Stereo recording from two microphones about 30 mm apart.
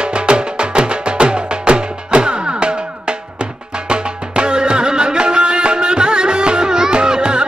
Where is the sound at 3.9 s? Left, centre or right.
Right.